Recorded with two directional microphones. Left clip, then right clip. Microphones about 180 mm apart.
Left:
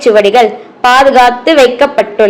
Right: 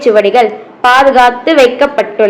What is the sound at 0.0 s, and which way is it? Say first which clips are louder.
A woman's voice: left 1 dB; 30° left (ahead or behind).